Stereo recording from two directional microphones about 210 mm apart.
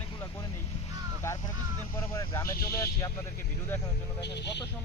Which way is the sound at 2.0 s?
15° left (ahead or behind).